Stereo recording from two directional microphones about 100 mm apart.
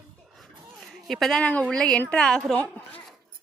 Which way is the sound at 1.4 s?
15° left (ahead or behind).